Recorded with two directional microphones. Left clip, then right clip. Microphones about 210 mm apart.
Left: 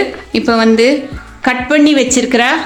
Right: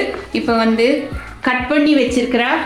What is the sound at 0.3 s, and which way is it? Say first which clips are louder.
Speech: left 5 dB; 50° left (ahead or behind).